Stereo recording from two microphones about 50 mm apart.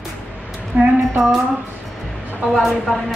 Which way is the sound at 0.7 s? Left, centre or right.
Right.